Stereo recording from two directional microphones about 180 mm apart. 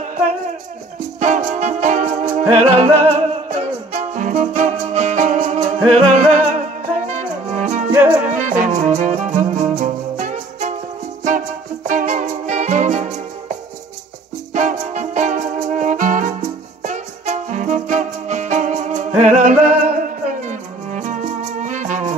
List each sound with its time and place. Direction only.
1.2 s music: 45° right (ahead or behind)
7.9 s music: 10° right (ahead or behind)
8.3 s music: 45° right (ahead or behind)